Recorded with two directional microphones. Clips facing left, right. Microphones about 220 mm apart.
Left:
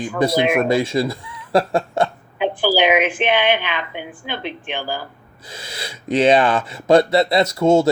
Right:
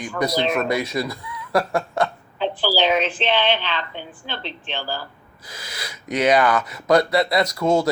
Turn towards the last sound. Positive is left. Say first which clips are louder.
# left 4 dB
turn(degrees=25)  # may be behind; listen again after turning